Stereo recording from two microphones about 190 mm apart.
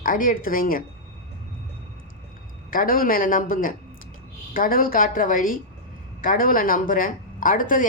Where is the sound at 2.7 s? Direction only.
50° left (ahead or behind).